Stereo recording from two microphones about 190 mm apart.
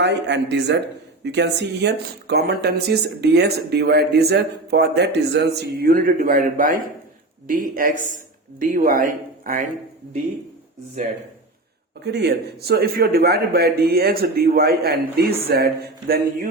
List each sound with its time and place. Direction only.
0.0 s speech: 65° right (ahead or behind); by 9.6 s 45° right (ahead or behind)
12.0 s speech: 60° right (ahead or behind)